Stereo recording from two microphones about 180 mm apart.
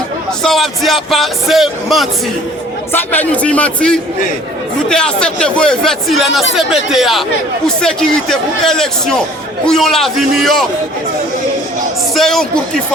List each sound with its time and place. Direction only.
0.4 s speech: centre (ahead or behind)
2.9 s speech: 10° left (ahead or behind)
12.1 s speech: centre (ahead or behind)